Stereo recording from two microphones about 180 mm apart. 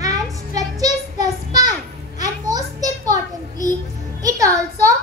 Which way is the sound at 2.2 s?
20° right (ahead or behind).